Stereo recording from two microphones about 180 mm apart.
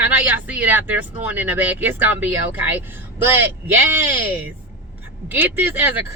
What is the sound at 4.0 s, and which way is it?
A woman's voice, 10° right (ahead or behind).